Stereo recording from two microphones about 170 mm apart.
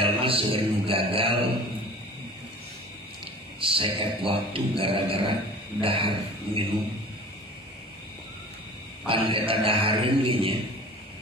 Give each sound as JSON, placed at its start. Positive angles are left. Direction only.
{"t": 0.0, "sound": "music", "side_deg": -30}
{"t": 3.6, "sound": "a sound", "side_deg": -30}
{"t": 4.3, "sound": "a man's voice", "side_deg": -30}
{"t": 9.0, "sound": "a man's voice", "side_deg": -30}